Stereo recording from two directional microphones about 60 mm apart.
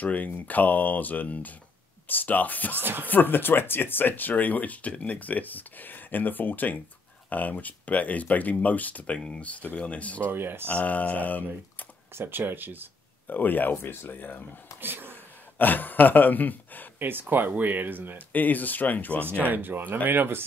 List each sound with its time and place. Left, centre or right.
0.0 s speech: left
2.7 s speech: right
3.1 s speech: left
10.3 s speech: right
10.7 s speech: left
12.1 s speech: right
13.3 s speech: left
14.8 s speech: right
15.5 s speech: left
17.0 s speech: right
18.3 s speech: left
19.2 s speech: right